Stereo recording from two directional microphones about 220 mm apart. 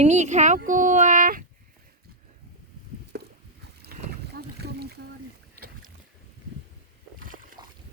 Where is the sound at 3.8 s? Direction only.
45° right (ahead or behind).